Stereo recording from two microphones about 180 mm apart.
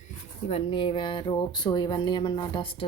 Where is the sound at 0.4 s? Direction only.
30° left (ahead or behind).